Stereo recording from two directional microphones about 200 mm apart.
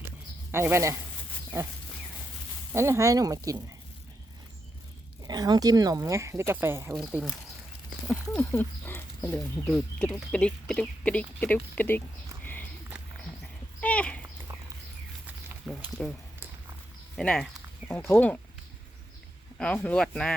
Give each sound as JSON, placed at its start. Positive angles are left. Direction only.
{"t": 0.5, "sound": "speech", "side_deg": -10}
{"t": 2.7, "sound": "speech", "side_deg": -15}
{"t": 5.2, "sound": "speech", "side_deg": -20}
{"t": 8.0, "sound": "a sound", "side_deg": 15}
{"t": 8.3, "sound": "speech", "side_deg": 10}
{"t": 12.4, "sound": "walk", "side_deg": 10}
{"t": 13.4, "sound": "horse", "side_deg": 5}
{"t": 15.7, "sound": "speech", "side_deg": -5}
{"t": 17.2, "sound": "speech", "side_deg": 0}
{"t": 19.5, "sound": "speech", "side_deg": 5}